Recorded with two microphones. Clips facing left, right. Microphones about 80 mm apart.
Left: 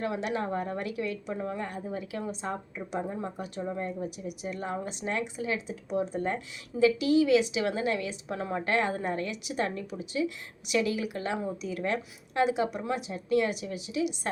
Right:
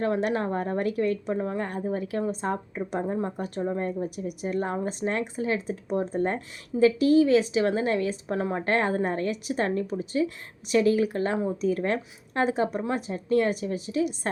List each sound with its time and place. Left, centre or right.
0.0 s a woman's voice: right